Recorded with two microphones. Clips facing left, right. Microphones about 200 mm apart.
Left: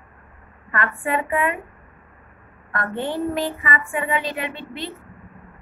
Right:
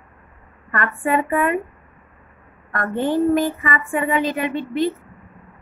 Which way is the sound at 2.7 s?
45° right (ahead or behind).